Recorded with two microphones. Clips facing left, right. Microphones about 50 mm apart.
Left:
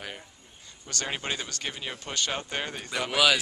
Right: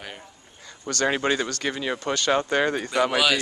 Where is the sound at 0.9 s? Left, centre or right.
Right.